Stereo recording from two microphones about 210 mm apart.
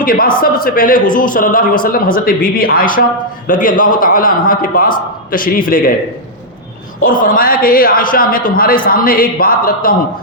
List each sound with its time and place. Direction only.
0.0 s a man's voice: 45° left (ahead or behind)
7.0 s a man's voice: 40° left (ahead or behind)